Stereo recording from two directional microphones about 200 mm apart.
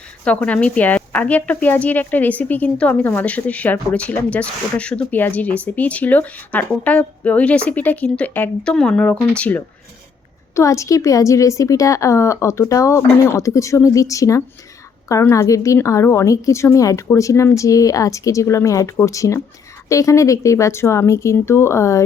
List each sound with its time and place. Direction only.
0.3 s speech: 5° left (ahead or behind)